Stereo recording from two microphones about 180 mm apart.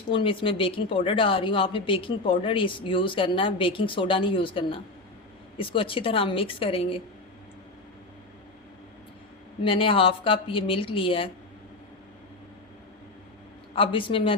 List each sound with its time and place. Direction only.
0.1 s a woman's voice: 30° left (ahead or behind)
9.6 s a woman's voice: 30° left (ahead or behind)
13.7 s a woman's voice: 30° left (ahead or behind)